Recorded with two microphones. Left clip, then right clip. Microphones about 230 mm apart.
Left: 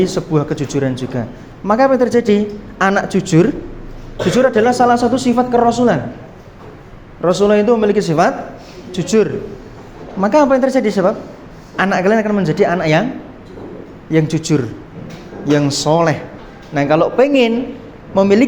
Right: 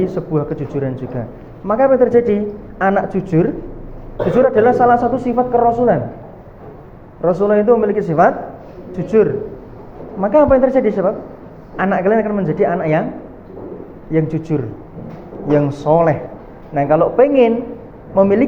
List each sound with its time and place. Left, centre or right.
0.0 s speech: left
7.2 s speech: left
14.1 s speech: left